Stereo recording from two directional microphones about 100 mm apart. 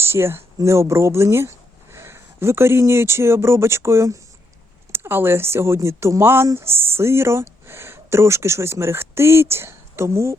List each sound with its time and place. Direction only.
0.0 s speech: 25° right (ahead or behind)